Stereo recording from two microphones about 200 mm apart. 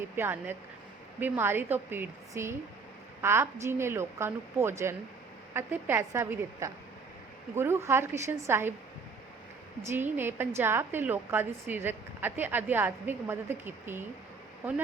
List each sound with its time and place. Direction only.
0.2 s a woman's voice: 10° right (ahead or behind)
9.8 s a woman's voice: 10° right (ahead or behind)